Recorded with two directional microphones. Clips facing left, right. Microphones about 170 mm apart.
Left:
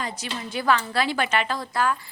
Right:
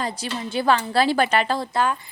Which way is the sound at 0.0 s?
30° right (ahead or behind).